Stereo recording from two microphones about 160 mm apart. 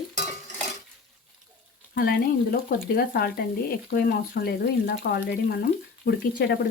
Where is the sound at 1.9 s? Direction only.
70° left (ahead or behind).